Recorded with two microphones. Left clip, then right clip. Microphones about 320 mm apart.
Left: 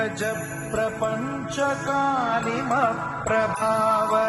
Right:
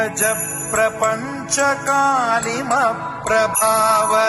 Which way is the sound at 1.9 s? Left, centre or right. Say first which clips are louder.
Right 6 dB; right.